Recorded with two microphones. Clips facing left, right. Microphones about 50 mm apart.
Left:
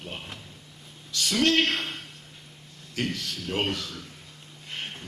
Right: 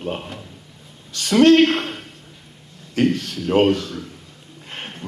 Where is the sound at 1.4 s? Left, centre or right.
Right.